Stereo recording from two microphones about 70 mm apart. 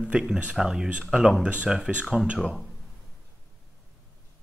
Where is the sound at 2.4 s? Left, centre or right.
Centre.